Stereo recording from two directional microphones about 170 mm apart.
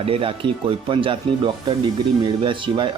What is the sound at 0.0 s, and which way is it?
Speech, 35° right (ahead or behind).